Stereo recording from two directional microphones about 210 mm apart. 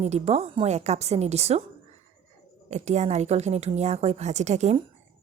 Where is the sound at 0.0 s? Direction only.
30° right (ahead or behind).